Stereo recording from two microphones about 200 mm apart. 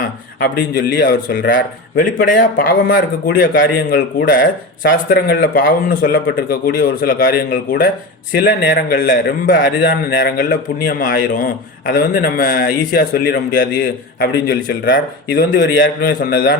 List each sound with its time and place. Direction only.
0.0 s a man's voice: 45° left (ahead or behind)
15.5 s a man's voice: 60° left (ahead or behind)